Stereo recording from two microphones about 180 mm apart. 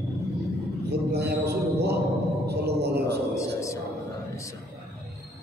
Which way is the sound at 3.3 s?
15° left (ahead or behind).